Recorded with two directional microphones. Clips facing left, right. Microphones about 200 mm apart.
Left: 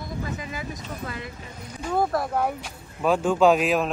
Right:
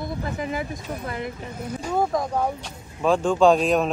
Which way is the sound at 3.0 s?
5° left (ahead or behind).